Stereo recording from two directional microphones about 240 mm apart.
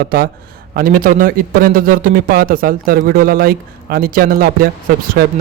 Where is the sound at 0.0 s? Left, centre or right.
Right.